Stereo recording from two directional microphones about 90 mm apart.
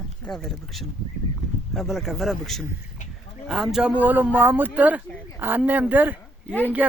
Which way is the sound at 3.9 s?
20° right (ahead or behind).